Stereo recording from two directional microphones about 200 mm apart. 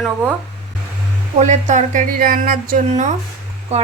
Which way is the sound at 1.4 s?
35° right (ahead or behind).